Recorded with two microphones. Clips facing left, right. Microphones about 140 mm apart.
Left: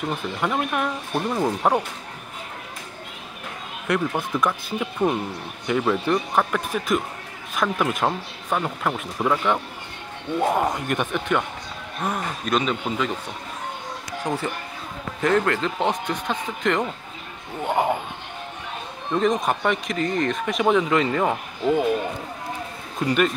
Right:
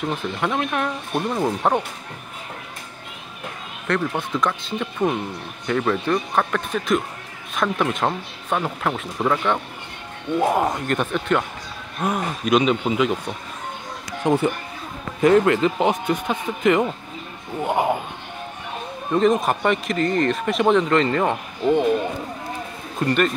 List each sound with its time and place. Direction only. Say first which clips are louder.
0.1 s speech: right 1 dB; centre (ahead or behind)
3.8 s speech: even; 10° left (ahead or behind)
10.9 s speech: right 2 dB; 5° left (ahead or behind)
12.0 s speech: right 4 dB; 10° right (ahead or behind)
14.2 s speech: right 8 dB; 20° right (ahead or behind); by 18.0 s 5° right (ahead or behind)
19.1 s speech: right 3 dB; 5° right (ahead or behind)
23.0 s speech: right 1 dB; 5° left (ahead or behind)